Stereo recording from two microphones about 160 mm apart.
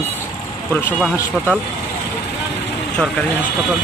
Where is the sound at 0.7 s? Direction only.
10° left (ahead or behind).